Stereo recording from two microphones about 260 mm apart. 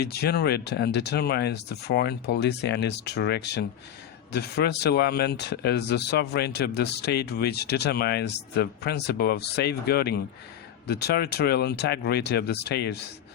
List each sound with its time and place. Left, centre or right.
0.0 s speech: left